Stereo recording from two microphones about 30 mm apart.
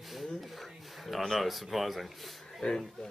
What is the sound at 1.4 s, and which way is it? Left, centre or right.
Speech, centre.